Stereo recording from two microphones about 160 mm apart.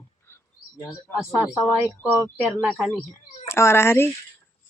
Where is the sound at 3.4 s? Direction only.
15° left (ahead or behind).